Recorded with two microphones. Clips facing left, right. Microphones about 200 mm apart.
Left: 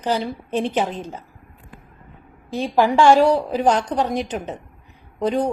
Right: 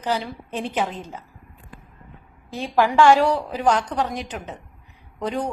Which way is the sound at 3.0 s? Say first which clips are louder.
Left 3 dB; 20° left (ahead or behind).